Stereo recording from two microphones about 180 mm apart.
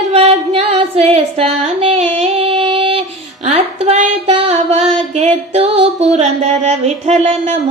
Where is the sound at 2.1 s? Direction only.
35° right (ahead or behind).